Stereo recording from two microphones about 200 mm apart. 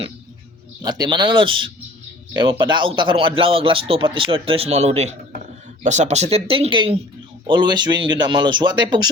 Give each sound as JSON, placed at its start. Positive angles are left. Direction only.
{"t": 0.8, "sound": "speech", "side_deg": -20}